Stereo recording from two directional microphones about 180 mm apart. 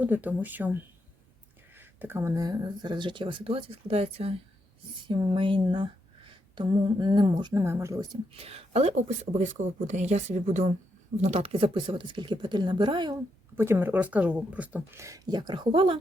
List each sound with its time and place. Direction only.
0.0 s speech: 10° right (ahead or behind); by 13.1 s 25° right (ahead or behind)
13.6 s speech: 10° right (ahead or behind); by 16.0 s 30° right (ahead or behind)